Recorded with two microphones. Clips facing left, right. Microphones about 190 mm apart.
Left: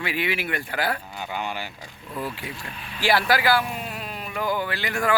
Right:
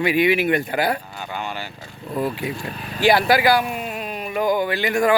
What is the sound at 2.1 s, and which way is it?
Speech, 40° right (ahead or behind).